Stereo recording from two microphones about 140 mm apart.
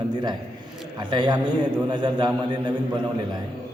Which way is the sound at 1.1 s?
30° right (ahead or behind).